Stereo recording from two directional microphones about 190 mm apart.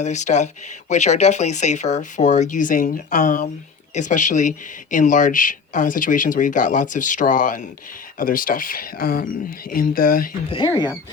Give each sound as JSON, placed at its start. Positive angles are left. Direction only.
{"t": 0.0, "sound": "speech", "side_deg": 40}
{"t": 10.5, "sound": "speech", "side_deg": 25}